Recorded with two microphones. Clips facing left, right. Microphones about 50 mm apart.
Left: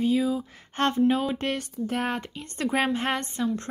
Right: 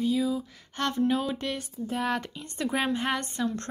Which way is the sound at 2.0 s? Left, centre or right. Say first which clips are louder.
Right 1 dB; left.